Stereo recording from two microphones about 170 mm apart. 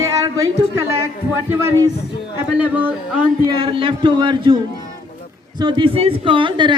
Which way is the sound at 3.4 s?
30° right (ahead or behind).